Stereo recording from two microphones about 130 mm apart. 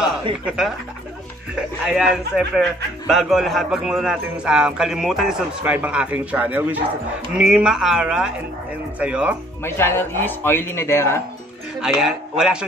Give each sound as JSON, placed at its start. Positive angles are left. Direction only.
{"t": 0.0, "sound": "speech", "side_deg": 0}
{"t": 1.9, "sound": "a man's voice", "side_deg": -5}
{"t": 9.6, "sound": "speech", "side_deg": 20}
{"t": 11.8, "sound": "a man's voice", "side_deg": -5}